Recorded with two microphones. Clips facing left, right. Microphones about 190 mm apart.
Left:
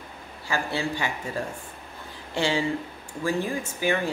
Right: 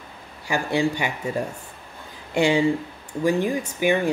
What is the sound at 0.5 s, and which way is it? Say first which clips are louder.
Speech: right 6 dB; 15° right (ahead or behind).